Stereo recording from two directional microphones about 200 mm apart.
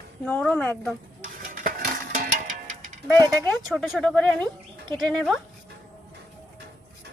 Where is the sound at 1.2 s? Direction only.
40° right (ahead or behind).